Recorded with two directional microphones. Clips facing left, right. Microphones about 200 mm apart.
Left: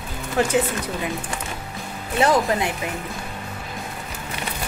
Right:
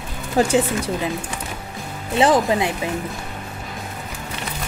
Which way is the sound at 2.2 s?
20° right (ahead or behind).